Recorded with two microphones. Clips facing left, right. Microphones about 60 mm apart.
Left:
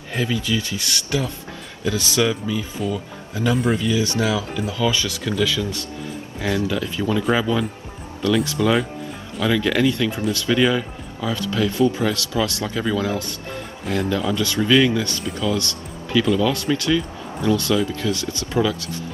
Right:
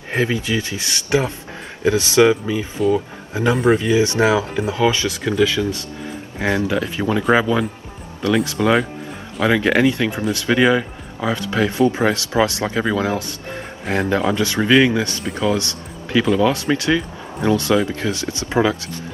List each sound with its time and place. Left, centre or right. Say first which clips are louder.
0.1 s speech: right 3 dB; right